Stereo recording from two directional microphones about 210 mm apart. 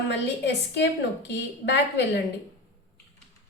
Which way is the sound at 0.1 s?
55° left (ahead or behind).